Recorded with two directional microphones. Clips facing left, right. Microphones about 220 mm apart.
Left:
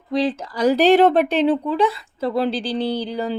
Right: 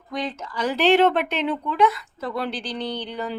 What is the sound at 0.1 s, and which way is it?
Speech, 30° left (ahead or behind).